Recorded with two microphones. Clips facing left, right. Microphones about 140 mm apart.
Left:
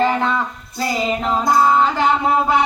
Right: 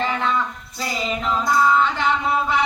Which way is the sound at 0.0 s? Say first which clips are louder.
Left 4 dB; 40° left (ahead or behind).